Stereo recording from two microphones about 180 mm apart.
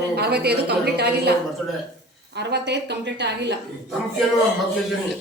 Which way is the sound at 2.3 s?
70° right (ahead or behind).